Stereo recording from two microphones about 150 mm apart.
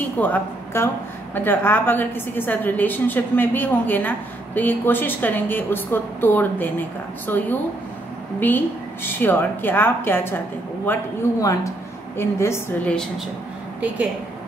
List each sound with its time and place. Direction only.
0.2 s a woman's voice: 10° left (ahead or behind)
12.2 s a woman's voice: 20° left (ahead or behind)